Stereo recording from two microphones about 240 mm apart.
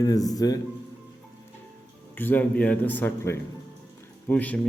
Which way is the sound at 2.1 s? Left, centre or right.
Centre.